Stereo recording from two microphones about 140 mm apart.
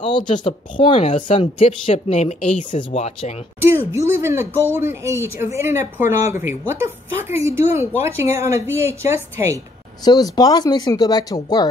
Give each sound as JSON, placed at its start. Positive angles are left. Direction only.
{"t": 0.0, "sound": "a woman's voice", "side_deg": 35}
{"t": 2.8, "sound": "speech", "side_deg": 45}
{"t": 3.6, "sound": "speech", "side_deg": -20}
{"t": 10.0, "sound": "speech", "side_deg": 30}